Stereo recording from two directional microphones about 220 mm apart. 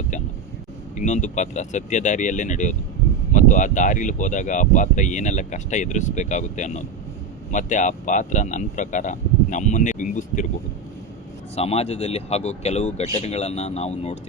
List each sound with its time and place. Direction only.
0.9 s speech: 35° left (ahead or behind)
11.5 s speech: 30° left (ahead or behind)